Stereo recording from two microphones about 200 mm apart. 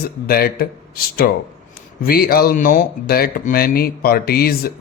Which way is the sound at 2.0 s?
45° left (ahead or behind).